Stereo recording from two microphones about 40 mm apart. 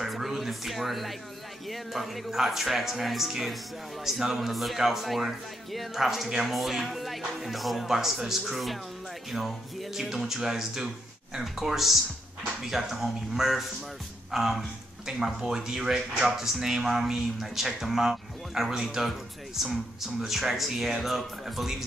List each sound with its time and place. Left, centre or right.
0.0 s music: centre
1.7 s speech: centre